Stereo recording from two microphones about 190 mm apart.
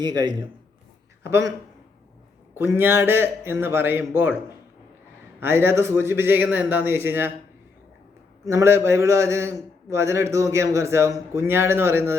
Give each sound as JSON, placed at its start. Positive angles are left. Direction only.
{"t": 0.0, "sound": "a man's voice", "side_deg": -20}
{"t": 2.6, "sound": "a man's voice", "side_deg": -10}
{"t": 5.4, "sound": "a man's voice", "side_deg": -10}
{"t": 8.4, "sound": "a man's voice", "side_deg": -15}